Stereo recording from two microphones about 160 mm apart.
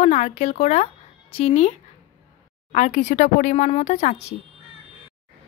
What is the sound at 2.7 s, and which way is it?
A woman's voice, 50° left (ahead or behind).